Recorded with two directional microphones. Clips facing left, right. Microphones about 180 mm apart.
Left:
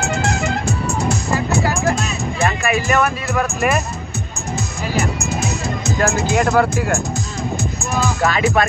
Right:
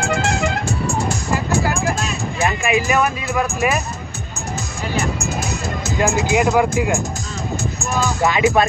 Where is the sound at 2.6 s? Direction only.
10° right (ahead or behind).